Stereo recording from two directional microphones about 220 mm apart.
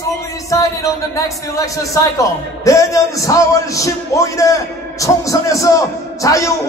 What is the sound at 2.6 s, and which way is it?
A man's voice, 15° left (ahead or behind).